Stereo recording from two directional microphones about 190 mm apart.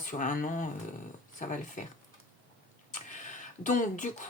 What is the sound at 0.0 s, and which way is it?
Speech, 40° left (ahead or behind).